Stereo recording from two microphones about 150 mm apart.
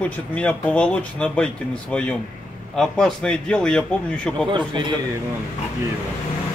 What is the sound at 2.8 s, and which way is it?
A man's voice, 5° left (ahead or behind).